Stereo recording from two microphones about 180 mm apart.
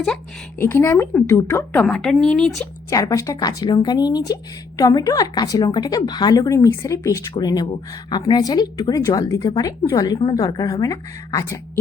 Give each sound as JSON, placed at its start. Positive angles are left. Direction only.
{"t": 0.6, "sound": "speech", "side_deg": 15}
{"t": 2.9, "sound": "a woman's voice", "side_deg": 20}